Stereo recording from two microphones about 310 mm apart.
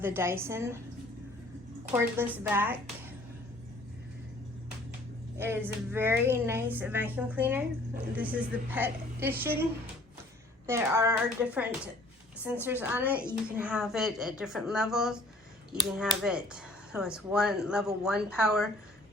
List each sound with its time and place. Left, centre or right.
0.0 s a woman's voice: centre
1.9 s a woman's voice: centre
5.4 s a woman's voice: centre
10.7 s a woman's voice: centre